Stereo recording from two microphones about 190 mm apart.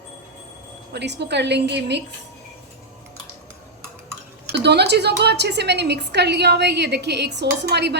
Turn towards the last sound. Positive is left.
turn(degrees=-60)  # may be behind; listen again after turning